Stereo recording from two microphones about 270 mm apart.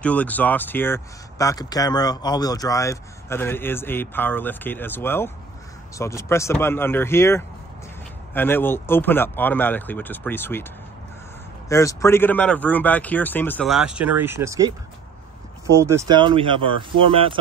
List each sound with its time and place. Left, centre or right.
0.0 s speech: centre
11.7 s speech: centre